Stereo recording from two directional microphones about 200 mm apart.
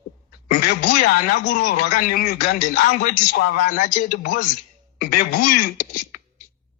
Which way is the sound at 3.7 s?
40° left (ahead or behind).